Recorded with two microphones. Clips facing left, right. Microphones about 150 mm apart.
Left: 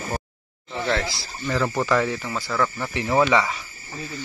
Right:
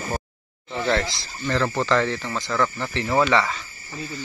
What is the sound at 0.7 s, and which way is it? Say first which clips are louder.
Speech: right 2 dB; centre (ahead or behind).